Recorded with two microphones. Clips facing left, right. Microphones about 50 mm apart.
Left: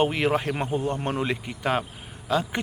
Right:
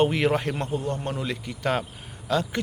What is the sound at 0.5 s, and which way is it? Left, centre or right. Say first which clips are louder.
Speech: left 2 dB; centre.